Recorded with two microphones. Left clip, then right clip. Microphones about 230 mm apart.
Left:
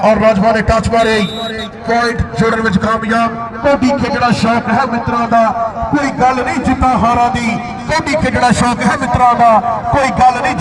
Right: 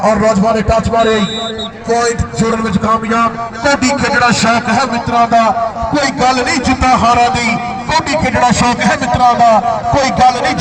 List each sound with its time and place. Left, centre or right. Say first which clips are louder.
0.0 s a man's voice: left 1 dB; left; by 1.2 s centre
1.9 s a man's voice: even; left
3.6 s a man's voice: even; right
4.7 s a man's voice: right 1 dB; centre
6.8 s speech: right 2 dB; right
7.2 s a man's voice: right 2 dB; right